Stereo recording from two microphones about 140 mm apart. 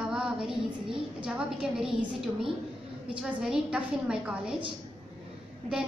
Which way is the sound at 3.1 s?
10° right (ahead or behind).